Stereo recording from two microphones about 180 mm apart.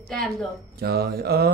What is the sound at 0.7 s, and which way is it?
Mantra, 60° right (ahead or behind).